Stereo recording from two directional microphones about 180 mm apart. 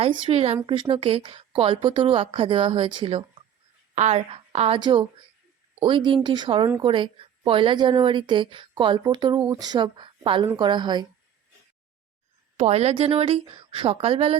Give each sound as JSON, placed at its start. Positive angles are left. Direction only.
{"t": 0.0, "sound": "a woman's voice", "side_deg": -30}
{"t": 12.5, "sound": "a woman's voice", "side_deg": -35}